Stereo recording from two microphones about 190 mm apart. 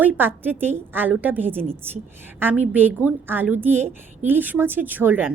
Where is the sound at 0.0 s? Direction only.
10° right (ahead or behind).